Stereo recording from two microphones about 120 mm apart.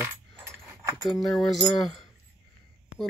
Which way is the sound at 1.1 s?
Centre (ahead or behind).